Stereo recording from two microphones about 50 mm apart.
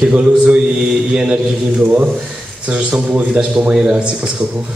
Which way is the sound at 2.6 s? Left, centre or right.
Right.